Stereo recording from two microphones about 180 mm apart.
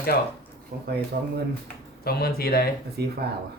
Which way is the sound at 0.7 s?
60° right (ahead or behind).